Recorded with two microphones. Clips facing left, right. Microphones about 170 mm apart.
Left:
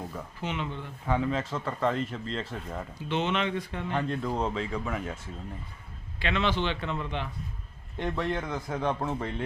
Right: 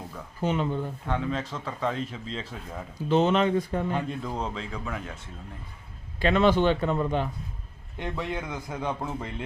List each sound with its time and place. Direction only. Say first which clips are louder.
0.4 s speech: right 8 dB; 40° right (ahead or behind)
1.0 s speech: left 5 dB; 5° left (ahead or behind)
3.1 s speech: right 7 dB; 40° right (ahead or behind)
3.9 s speech: left 1 dB; centre (ahead or behind)
6.1 s a man's voice: right 7 dB; 45° right (ahead or behind)
7.9 s speech: left 2 dB; centre (ahead or behind)